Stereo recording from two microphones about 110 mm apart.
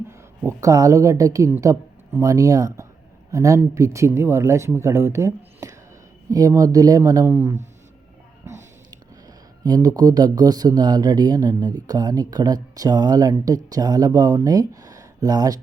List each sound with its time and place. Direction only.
0.4 s speech: 30° right (ahead or behind)
9.6 s speech: 35° right (ahead or behind)